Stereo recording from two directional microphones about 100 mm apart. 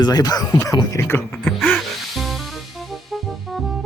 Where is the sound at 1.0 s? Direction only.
20° left (ahead or behind).